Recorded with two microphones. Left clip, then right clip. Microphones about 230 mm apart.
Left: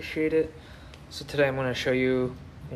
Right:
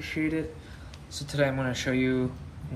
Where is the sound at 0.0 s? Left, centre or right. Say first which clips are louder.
Left 5 dB; left.